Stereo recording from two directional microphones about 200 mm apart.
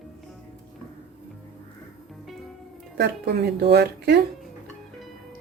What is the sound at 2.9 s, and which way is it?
Speech, 55° right (ahead or behind).